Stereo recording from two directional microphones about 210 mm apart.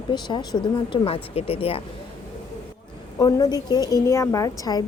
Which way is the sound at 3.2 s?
15° left (ahead or behind).